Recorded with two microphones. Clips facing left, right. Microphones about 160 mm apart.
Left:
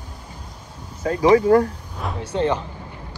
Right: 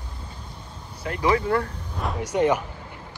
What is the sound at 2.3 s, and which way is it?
Speech, 10° right (ahead or behind).